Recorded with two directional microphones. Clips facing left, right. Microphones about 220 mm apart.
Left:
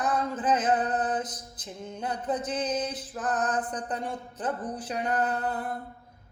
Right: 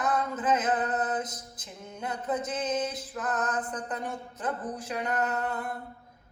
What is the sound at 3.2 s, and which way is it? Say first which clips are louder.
Mantra: left 2 dB; 35° left (ahead or behind).